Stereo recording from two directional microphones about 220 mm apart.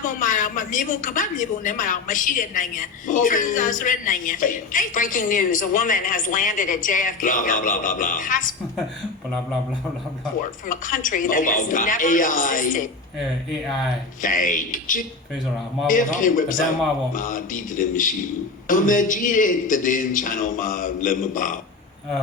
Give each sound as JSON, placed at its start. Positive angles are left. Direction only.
{"t": 0.0, "sound": "a woman's voice", "side_deg": 35}
{"t": 10.7, "sound": "a woman's voice", "side_deg": 35}
{"t": 14.2, "sound": "a woman's voice", "side_deg": 35}